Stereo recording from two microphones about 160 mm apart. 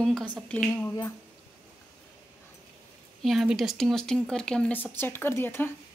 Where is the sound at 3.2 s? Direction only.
Centre (ahead or behind).